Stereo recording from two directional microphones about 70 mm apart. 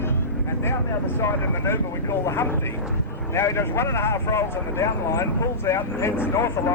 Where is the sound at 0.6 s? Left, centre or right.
Left.